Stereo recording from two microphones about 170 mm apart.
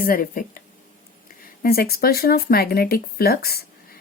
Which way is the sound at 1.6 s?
60° left (ahead or behind).